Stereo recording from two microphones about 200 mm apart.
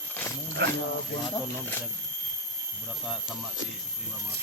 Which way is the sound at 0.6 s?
55° right (ahead or behind).